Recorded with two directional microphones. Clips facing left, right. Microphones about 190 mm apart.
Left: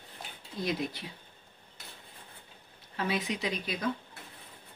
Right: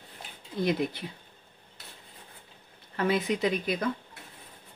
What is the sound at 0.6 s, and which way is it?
Speech, 55° right (ahead or behind).